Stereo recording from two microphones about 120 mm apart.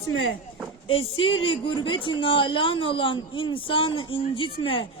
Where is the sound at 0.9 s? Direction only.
50° left (ahead or behind).